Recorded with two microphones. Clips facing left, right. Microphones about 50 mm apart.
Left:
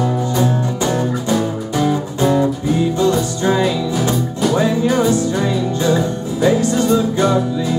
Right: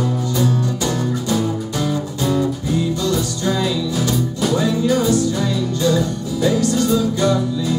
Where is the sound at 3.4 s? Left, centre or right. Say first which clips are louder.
Left 5 dB; left.